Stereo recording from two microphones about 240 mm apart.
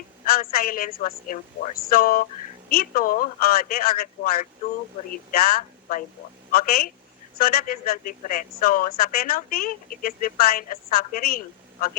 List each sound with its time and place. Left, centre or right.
0.3 s speech: left